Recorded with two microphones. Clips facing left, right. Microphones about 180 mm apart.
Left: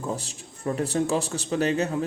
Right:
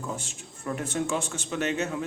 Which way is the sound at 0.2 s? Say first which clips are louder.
Left 4 dB; 35° left (ahead or behind).